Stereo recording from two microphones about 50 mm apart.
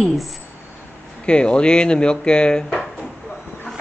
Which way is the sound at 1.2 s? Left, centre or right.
Left.